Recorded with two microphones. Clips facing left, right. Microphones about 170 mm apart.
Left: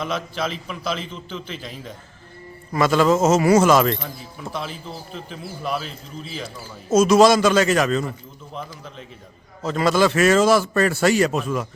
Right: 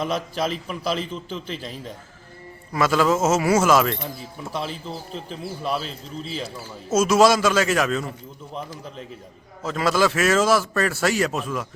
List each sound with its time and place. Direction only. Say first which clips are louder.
0.0 s a man's voice: right 1 dB; 40° right (ahead or behind)
2.7 s a man's voice: left 3 dB; 5° right (ahead or behind)
4.5 s a man's voice: right 2 dB; 35° right (ahead or behind)
6.9 s a man's voice: left 3 dB; 5° right (ahead or behind)
9.6 s a man's voice: left 2 dB; centre (ahead or behind)